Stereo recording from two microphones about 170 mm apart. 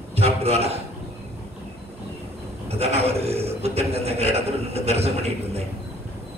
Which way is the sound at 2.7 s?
35° right (ahead or behind).